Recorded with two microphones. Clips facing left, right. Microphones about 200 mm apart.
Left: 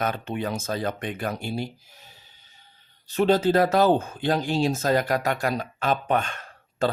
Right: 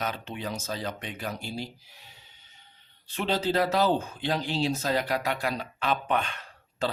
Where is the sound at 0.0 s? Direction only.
50° left (ahead or behind).